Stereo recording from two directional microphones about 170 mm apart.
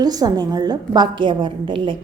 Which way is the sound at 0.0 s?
25° right (ahead or behind).